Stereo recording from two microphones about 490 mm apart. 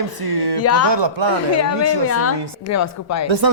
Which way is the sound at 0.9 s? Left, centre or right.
Right.